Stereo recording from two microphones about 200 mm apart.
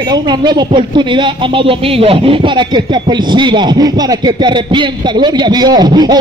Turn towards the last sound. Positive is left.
turn(degrees=-20)  # may be behind; listen again after turning